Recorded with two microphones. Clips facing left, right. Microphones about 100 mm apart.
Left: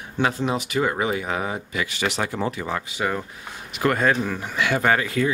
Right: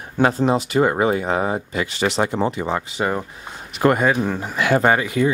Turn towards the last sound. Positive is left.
turn(degrees=-20)  # may be behind; listen again after turning